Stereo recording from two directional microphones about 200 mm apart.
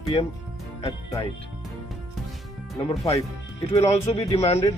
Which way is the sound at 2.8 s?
30° left (ahead or behind).